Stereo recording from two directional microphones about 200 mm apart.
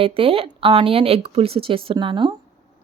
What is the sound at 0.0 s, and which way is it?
A woman's voice, 25° right (ahead or behind).